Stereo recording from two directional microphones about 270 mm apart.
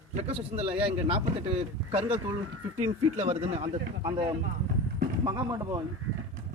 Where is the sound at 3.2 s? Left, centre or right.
Right.